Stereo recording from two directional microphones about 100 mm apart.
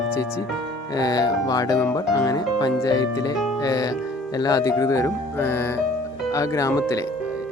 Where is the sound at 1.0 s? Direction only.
40° left (ahead or behind).